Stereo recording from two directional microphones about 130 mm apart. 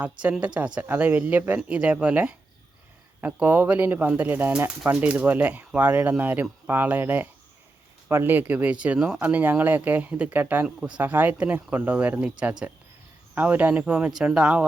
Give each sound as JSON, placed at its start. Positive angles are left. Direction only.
{"t": 0.0, "sound": "speech", "side_deg": -10}